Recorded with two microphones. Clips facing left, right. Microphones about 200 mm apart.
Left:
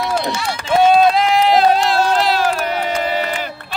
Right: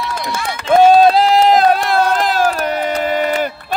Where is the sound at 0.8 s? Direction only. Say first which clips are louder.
Right 2 dB; 35° right (ahead or behind).